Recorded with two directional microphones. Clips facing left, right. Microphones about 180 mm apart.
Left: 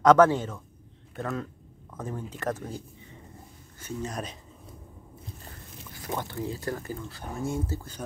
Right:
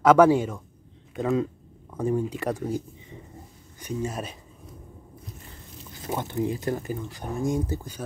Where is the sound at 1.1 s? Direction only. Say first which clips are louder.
Right 8 dB; 15° right (ahead or behind).